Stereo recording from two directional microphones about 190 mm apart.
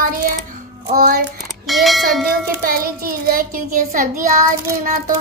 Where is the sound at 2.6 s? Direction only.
50° right (ahead or behind).